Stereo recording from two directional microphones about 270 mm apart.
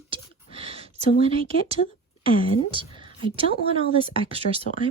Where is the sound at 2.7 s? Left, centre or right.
Centre.